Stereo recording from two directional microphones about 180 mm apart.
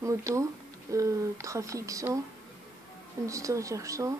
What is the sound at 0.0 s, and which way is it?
Speech, 15° right (ahead or behind).